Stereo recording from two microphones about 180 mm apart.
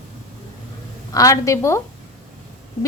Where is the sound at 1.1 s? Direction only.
20° left (ahead or behind).